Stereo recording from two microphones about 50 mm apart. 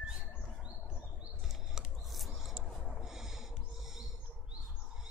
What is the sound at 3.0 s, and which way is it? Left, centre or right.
Owl, centre.